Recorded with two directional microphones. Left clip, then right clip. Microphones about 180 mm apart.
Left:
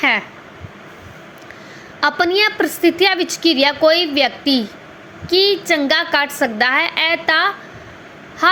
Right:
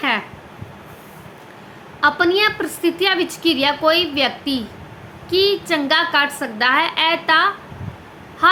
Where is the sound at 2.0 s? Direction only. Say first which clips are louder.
Even; 30° left (ahead or behind).